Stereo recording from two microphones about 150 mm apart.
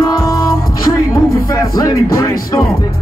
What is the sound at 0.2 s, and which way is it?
Music, 25° left (ahead or behind).